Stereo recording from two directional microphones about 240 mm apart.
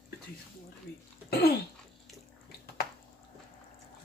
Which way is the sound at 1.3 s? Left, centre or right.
Left.